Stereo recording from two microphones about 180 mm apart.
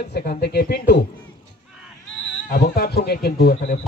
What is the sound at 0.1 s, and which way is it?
Speech, 65° left (ahead or behind).